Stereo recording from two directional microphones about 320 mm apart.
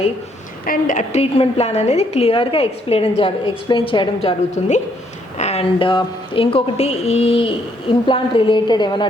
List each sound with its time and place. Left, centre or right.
0.6 s a woman's voice: left